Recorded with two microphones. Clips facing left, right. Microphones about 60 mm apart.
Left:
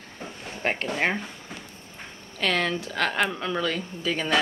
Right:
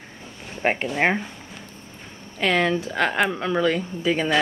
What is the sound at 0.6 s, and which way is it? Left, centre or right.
Speech, centre.